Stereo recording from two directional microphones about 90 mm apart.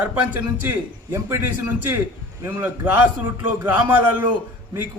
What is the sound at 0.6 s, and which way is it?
Speech, 25° right (ahead or behind).